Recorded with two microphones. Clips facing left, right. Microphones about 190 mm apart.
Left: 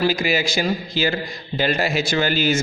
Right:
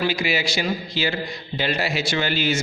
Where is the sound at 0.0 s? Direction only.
40° left (ahead or behind).